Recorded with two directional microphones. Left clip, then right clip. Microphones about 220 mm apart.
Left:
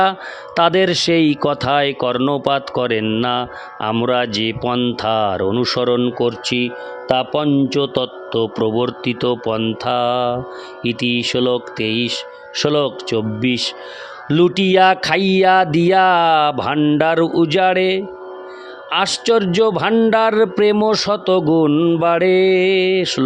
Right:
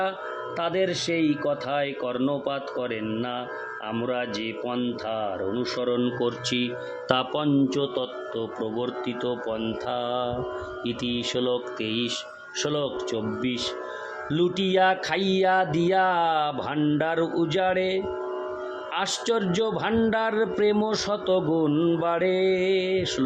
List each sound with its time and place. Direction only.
0.0 s speech: 50° left (ahead or behind)